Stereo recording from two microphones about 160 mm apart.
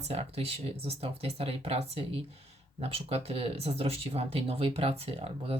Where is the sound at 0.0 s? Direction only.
40° right (ahead or behind).